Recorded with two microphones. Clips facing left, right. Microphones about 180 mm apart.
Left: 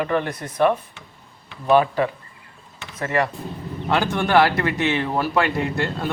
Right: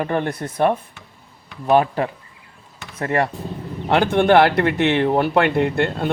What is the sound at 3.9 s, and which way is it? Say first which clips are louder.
Speech: right 5 dB; 60° right (ahead or behind).